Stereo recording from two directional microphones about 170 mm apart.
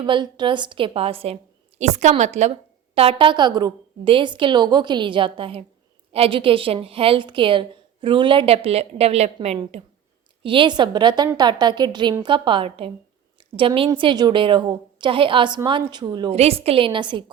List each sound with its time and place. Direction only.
0.0 s a woman's voice: 25° right (ahead or behind)
16.3 s a woman's voice: 35° right (ahead or behind)